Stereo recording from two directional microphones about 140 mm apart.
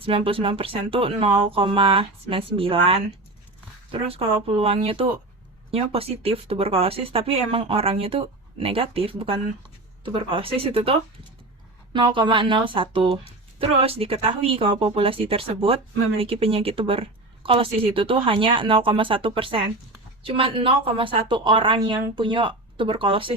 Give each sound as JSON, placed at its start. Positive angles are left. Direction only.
{"t": 0.0, "sound": "speech", "side_deg": -40}
{"t": 11.9, "sound": "speech", "side_deg": -35}